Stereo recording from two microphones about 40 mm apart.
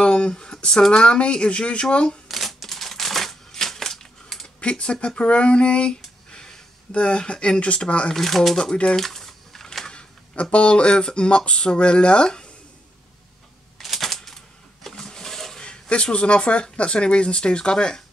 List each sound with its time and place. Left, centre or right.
0.0 s speech: left
2.2 s typewriter: centre
4.6 s speech: left
5.0 s a sound: left
8.1 s speech: centre
8.9 s a sound: centre
10.3 s speech: left
13.7 s a sound: centre
15.6 s speech: left